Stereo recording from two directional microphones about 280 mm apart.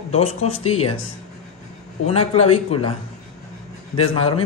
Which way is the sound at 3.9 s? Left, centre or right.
Centre.